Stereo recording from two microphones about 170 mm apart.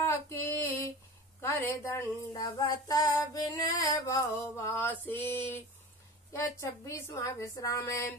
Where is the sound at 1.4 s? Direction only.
15° left (ahead or behind).